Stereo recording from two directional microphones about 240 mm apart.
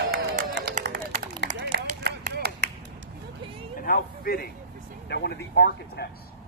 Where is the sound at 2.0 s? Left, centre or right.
Right.